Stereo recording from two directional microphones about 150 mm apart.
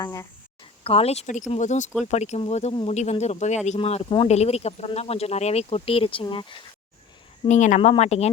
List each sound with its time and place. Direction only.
0.0 s speech: 20° left (ahead or behind)
0.9 s speech: 40° left (ahead or behind)
7.4 s speech: 55° left (ahead or behind)